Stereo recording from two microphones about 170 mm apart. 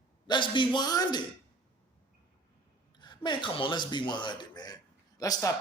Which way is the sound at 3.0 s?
25° left (ahead or behind).